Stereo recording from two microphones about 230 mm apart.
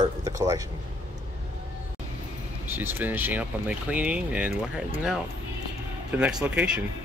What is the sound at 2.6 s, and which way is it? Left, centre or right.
Speech, centre.